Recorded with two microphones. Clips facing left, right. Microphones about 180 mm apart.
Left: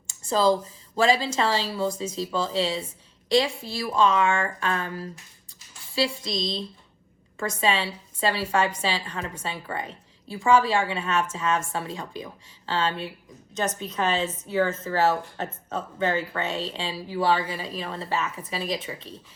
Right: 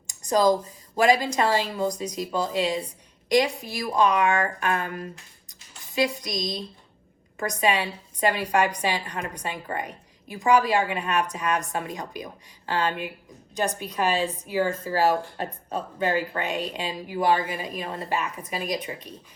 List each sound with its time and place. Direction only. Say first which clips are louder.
0.3 s a woman's voice: right 1 dB; 15° right (ahead or behind)
9.7 s a sound: right 1 dB; 15° right (ahead or behind)
10.4 s a woman's voice: even; 15° right (ahead or behind)
14.2 s a woman's voice: right 1 dB; 20° left (ahead or behind)
14.4 s a woman's voice: left 1 dB; 15° right (ahead or behind)